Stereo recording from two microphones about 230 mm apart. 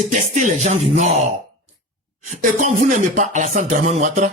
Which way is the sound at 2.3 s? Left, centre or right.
Right.